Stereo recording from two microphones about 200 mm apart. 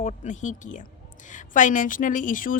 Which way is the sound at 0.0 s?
40° left (ahead or behind).